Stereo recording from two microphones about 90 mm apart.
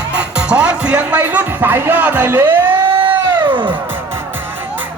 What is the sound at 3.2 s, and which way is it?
Music, 55° right (ahead or behind).